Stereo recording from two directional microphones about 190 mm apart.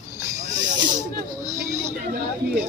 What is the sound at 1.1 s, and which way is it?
Speech, 40° right (ahead or behind).